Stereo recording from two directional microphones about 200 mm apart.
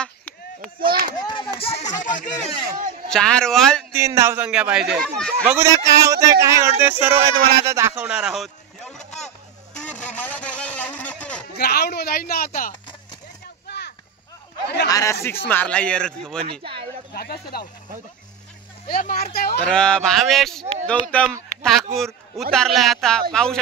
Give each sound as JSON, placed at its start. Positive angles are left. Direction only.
{"t": 0.0, "sound": "chop", "side_deg": 5}
{"t": 1.1, "sound": "a sound", "side_deg": 25}
{"t": 3.1, "sound": "speech", "side_deg": 5}
{"t": 3.9, "sound": "a man's voice", "side_deg": -15}
{"t": 10.0, "sound": "vehicle", "side_deg": 10}
{"t": 11.5, "sound": "speech", "side_deg": 55}
{"t": 13.7, "sound": "a sound", "side_deg": 55}
{"t": 14.9, "sound": "a man's voice", "side_deg": 15}
{"t": 17.1, "sound": "speech", "side_deg": 50}
{"t": 18.9, "sound": "speech", "side_deg": 45}
{"t": 19.6, "sound": "a man's voice", "side_deg": 5}
{"t": 21.5, "sound": "a sound", "side_deg": 35}
{"t": 22.5, "sound": "speech", "side_deg": 0}